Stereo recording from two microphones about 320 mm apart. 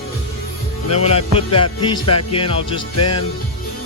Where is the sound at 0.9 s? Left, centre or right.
Centre.